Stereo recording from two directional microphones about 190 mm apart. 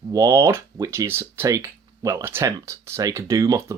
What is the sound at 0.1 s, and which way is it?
Speech, 15° right (ahead or behind).